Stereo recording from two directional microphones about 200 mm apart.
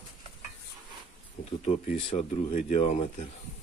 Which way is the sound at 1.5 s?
30° left (ahead or behind).